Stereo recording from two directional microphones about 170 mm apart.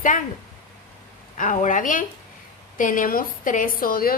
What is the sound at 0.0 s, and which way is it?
Speech, 50° left (ahead or behind).